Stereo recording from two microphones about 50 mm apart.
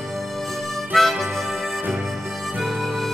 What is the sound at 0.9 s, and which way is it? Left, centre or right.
Harmonica, centre.